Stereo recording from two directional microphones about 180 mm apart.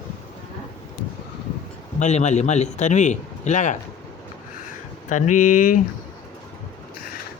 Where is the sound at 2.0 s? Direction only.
40° left (ahead or behind).